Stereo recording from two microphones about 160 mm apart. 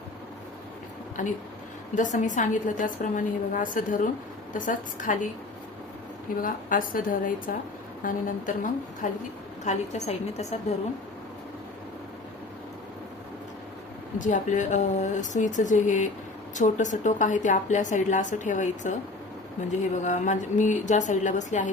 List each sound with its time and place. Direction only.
1.2 s a woman's voice: 55° left (ahead or behind)
6.4 s a woman's voice: 60° left (ahead or behind)
9.6 s a woman's voice: 45° left (ahead or behind)
14.2 s a woman's voice: 50° left (ahead or behind)
20.1 s a woman's voice: 50° left (ahead or behind)